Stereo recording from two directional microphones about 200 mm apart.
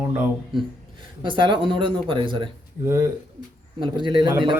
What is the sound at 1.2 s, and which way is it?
Speech, 25° right (ahead or behind).